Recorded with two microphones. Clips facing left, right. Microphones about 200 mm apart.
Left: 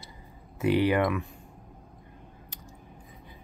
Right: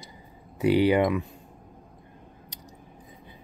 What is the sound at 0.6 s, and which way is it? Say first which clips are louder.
Speech: right 3 dB; 15° right (ahead or behind).